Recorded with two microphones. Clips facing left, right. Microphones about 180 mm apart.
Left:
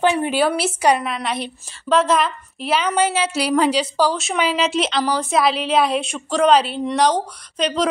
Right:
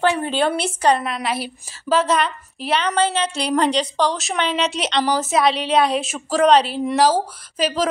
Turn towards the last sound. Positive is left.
turn(degrees=-5)  # may be behind; listen again after turning